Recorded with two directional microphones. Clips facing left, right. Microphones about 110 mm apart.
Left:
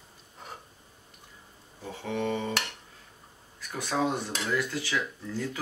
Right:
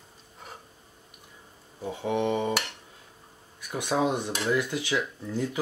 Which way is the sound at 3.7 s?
20° right (ahead or behind).